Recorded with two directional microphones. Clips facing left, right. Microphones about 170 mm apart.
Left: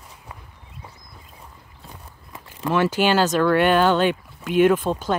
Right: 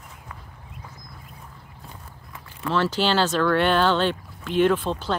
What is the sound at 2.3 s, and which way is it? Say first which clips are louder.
Walk: left 3 dB; 15° left (ahead or behind).